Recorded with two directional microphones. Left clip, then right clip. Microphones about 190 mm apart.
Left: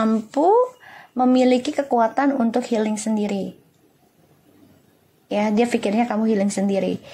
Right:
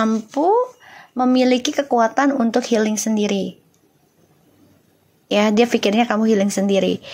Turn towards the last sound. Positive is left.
turn(degrees=-15)  # may be behind; listen again after turning